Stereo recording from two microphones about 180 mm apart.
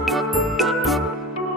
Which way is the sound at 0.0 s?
Centre (ahead or behind).